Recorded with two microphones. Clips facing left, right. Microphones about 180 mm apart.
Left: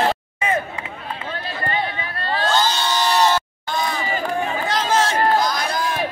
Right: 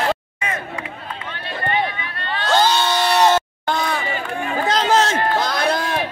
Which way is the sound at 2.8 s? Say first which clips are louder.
Right 2 dB; 60° right (ahead or behind).